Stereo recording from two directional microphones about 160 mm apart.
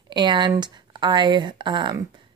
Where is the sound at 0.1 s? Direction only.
30° right (ahead or behind).